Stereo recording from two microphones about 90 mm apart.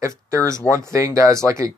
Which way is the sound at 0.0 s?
30° right (ahead or behind).